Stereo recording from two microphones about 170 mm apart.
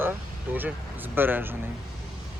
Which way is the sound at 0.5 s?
10° right (ahead or behind).